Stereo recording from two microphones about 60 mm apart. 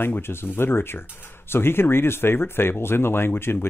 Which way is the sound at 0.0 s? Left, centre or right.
Left.